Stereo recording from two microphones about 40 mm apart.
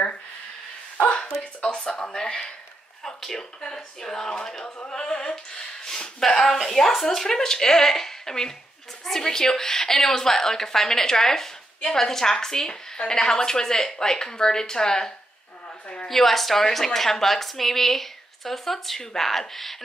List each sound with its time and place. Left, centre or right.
1.1 s a sound: centre
1.6 s a woman's voice: left
16.1 s a woman's voice: centre